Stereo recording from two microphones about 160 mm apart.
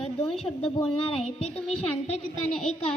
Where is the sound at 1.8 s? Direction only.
40° left (ahead or behind).